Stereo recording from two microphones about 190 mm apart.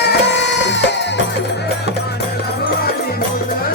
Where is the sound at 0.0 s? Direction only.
65° left (ahead or behind).